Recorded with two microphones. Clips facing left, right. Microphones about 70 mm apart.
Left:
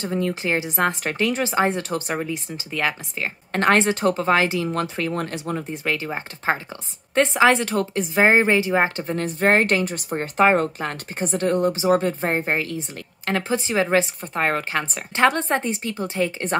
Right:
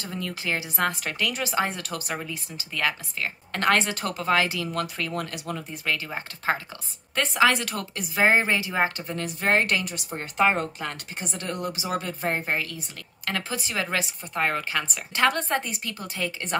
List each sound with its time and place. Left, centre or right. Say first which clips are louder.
0.0 s a woman's voice: left 8 dB; left